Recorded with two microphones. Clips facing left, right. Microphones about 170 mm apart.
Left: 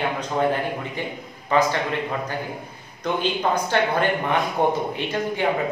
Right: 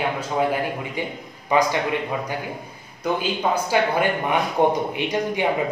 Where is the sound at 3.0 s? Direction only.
10° right (ahead or behind).